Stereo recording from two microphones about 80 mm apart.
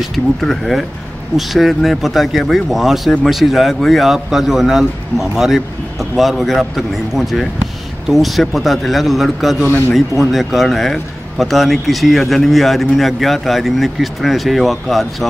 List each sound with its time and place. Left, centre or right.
0.1 s speech: centre
9.7 s a man's voice: left
9.9 s speech: centre